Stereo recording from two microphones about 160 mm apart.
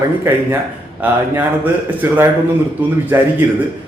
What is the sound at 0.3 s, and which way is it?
A man's voice, 15° right (ahead or behind).